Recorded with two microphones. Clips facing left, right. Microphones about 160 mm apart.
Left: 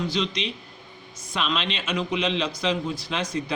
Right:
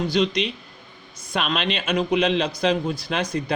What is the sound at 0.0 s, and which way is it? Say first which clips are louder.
A man's voice: right 5 dB; 55° right (ahead or behind).